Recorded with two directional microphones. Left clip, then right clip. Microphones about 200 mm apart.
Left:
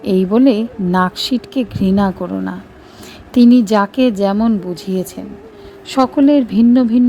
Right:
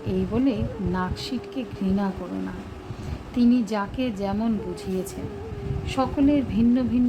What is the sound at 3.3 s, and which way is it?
Speech, 45° left (ahead or behind).